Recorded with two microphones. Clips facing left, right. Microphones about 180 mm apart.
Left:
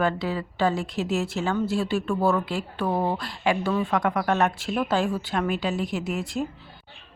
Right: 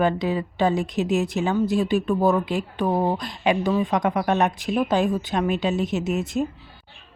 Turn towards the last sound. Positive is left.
turn(degrees=-20)  # may be behind; listen again after turning